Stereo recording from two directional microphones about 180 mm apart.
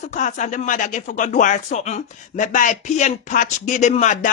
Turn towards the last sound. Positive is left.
turn(degrees=40)  # may be behind; listen again after turning